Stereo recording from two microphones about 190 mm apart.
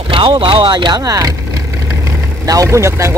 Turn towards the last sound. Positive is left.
turn(degrees=-15)  # may be behind; listen again after turning